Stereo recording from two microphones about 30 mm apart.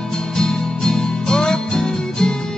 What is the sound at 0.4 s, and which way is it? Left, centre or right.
Music, left.